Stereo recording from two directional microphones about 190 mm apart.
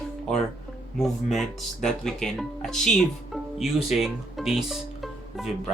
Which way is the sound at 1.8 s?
Centre (ahead or behind).